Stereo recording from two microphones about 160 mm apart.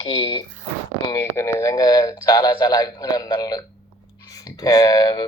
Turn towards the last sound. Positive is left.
turn(degrees=25)  # may be behind; listen again after turning